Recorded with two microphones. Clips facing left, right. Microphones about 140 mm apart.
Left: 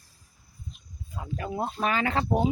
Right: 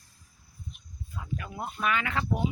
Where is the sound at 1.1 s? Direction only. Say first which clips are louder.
Left 5 dB; 35° left (ahead or behind).